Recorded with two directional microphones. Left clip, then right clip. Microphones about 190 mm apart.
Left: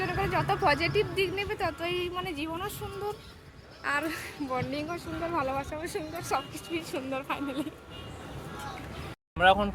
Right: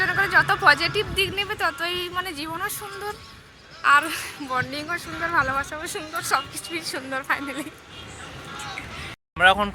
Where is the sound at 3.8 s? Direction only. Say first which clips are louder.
Right 12 dB; 15° left (ahead or behind).